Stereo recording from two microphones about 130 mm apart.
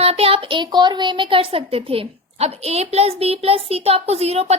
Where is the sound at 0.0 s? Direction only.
50° right (ahead or behind).